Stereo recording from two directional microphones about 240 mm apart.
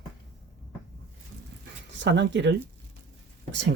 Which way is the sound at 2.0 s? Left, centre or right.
Right.